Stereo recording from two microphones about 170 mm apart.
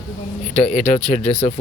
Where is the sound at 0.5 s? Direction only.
40° left (ahead or behind).